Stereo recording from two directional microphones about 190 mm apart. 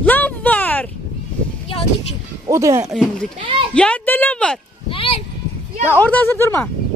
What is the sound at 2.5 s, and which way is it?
Speech, 15° right (ahead or behind).